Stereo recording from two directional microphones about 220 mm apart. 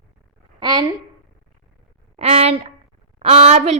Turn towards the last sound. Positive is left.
turn(degrees=-30)  # may be behind; listen again after turning